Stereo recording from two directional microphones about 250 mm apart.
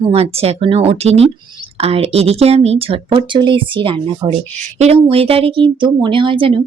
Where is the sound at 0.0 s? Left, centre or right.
Right.